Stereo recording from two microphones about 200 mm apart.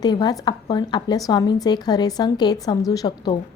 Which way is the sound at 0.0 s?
20° left (ahead or behind).